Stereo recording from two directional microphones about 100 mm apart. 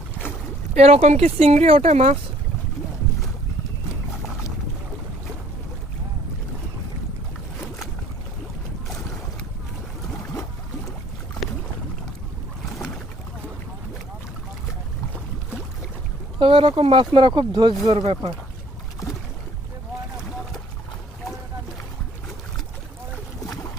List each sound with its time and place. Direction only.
0.8 s speech: 90° right
16.4 s speech: 60° right (ahead or behind)